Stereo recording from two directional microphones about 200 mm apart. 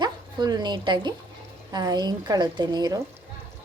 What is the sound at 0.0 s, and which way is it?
A woman's voice, 20° right (ahead or behind).